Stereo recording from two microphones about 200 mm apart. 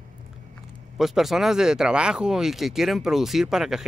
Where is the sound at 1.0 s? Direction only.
Centre (ahead or behind).